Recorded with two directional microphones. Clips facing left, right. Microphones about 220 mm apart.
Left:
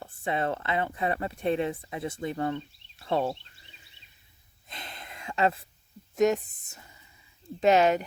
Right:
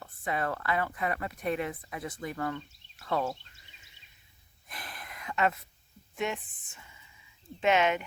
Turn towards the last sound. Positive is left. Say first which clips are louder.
# left 5 dB
turn(degrees=35)  # may be behind; listen again after turning